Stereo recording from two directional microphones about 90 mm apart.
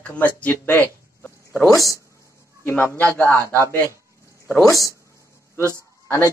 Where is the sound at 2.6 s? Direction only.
20° left (ahead or behind).